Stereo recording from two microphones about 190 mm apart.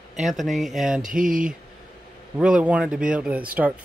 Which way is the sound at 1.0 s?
45° right (ahead or behind).